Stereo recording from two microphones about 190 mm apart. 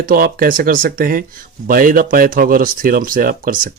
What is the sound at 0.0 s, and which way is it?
Speech, 50° right (ahead or behind).